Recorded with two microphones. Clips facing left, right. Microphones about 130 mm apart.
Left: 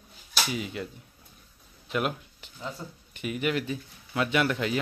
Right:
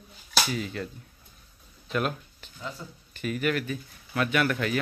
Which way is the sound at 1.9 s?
20° left (ahead or behind).